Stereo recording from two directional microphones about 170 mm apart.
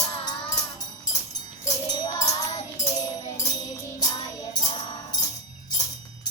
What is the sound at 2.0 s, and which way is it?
Music, 20° left (ahead or behind).